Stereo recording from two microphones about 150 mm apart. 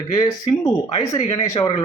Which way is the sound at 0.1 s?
25° left (ahead or behind).